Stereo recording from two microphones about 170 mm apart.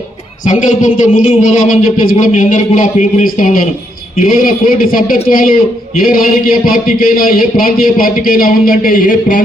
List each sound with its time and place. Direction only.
0.4 s a man's voice: 45° left (ahead or behind)